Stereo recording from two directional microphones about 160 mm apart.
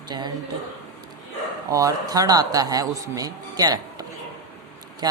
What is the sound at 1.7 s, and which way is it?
Speech, 20° right (ahead or behind).